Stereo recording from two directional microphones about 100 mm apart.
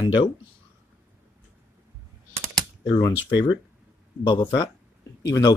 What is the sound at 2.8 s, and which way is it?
Speech, 45° left (ahead or behind).